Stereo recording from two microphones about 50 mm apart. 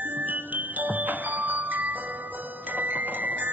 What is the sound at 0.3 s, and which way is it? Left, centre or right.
Music, right.